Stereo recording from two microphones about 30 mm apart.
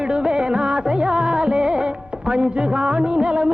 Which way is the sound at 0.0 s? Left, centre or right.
Right.